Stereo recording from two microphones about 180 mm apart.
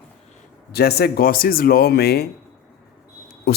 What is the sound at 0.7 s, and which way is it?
A man's voice, 60° left (ahead or behind).